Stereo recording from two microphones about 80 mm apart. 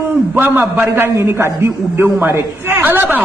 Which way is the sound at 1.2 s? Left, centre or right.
Right.